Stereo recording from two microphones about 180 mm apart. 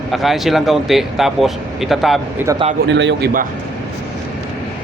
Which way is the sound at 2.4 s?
10° right (ahead or behind).